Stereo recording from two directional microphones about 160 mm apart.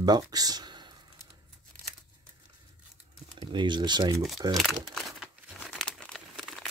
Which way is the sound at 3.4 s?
30° right (ahead or behind).